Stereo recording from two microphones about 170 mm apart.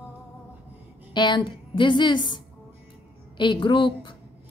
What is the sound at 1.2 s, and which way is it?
Speech, 25° left (ahead or behind).